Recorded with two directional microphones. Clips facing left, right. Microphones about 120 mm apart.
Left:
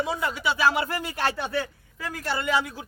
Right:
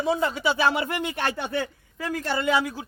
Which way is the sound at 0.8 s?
35° left (ahead or behind).